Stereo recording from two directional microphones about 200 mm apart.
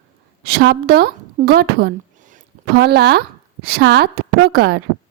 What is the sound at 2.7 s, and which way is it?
A woman's voice, 55° right (ahead or behind).